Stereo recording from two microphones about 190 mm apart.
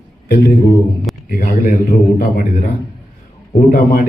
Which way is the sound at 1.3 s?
45° left (ahead or behind).